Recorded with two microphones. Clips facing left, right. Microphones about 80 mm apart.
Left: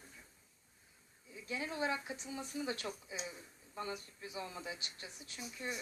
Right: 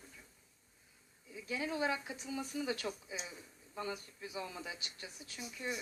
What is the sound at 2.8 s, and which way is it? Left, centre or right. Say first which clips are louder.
Speech: right 2 dB; centre.